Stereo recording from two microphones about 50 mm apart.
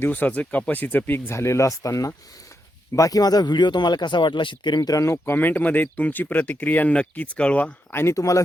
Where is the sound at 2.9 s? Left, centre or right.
Left.